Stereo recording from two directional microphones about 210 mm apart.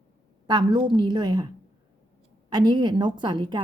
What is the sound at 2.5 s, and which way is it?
Speech, 20° right (ahead or behind).